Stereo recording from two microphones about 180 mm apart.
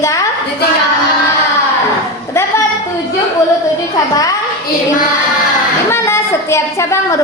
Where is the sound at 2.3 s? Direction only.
15° left (ahead or behind).